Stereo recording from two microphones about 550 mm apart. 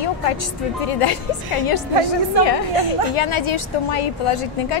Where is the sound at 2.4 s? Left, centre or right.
Left.